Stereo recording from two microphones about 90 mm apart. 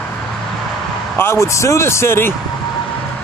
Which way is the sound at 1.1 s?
30° left (ahead or behind).